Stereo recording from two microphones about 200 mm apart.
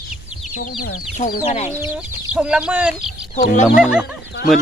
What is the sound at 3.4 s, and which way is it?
Speech, 45° left (ahead or behind).